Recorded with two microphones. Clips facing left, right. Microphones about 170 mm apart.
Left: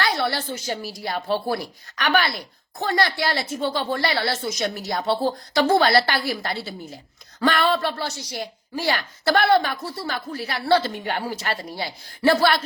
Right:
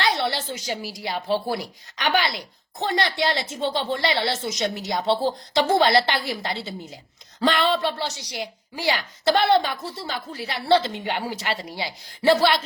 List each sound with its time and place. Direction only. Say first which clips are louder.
0.0 s a woman's voice: even; 20° right (ahead or behind)